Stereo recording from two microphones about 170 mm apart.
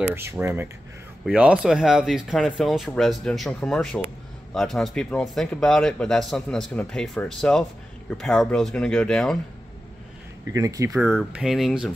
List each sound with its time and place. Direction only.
0.1 s speech: 15° right (ahead or behind); by 9.4 s centre (ahead or behind)
10.5 s speech: 20° right (ahead or behind)
11.3 s speech: centre (ahead or behind)